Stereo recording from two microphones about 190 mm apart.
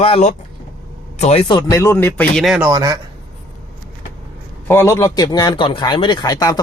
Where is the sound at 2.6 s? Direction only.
20° right (ahead or behind).